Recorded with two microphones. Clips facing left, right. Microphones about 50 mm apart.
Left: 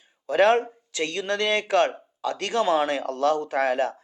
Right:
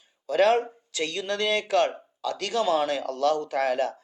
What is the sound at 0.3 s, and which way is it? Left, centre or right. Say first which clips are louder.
A man's voice: left 2 dB; left.